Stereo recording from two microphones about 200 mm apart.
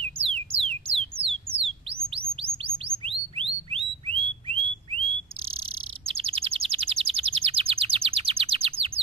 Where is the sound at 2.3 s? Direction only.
30° right (ahead or behind).